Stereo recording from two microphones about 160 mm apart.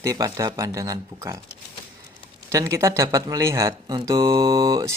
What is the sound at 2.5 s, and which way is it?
Speech, 20° right (ahead or behind).